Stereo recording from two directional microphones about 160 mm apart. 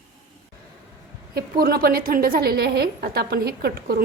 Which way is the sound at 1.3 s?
75° right (ahead or behind).